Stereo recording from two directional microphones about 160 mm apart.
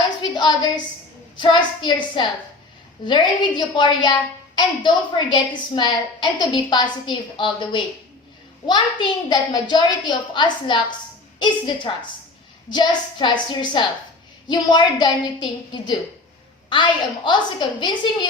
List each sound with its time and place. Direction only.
0.2 s a sound: 30° left (ahead or behind)
1.4 s a woman's voice: 30° left (ahead or behind)
5.3 s a woman's voice: 30° left (ahead or behind)